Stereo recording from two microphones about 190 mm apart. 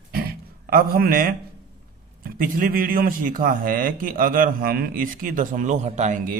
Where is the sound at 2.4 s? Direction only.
50° right (ahead or behind).